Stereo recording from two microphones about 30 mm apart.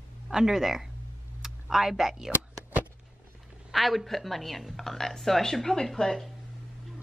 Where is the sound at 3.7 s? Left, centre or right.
Centre.